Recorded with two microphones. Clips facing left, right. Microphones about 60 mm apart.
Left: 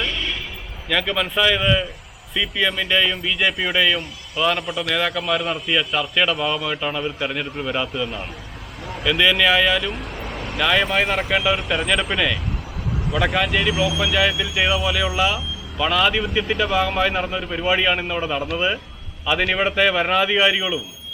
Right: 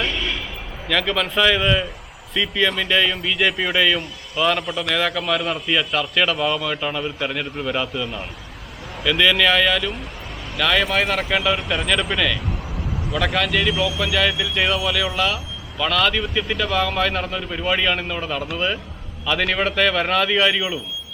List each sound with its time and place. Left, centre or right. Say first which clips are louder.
0.9 s speech: right 1 dB; centre
10.0 s vehicle: left 4 dB; left
10.6 s speech: even; centre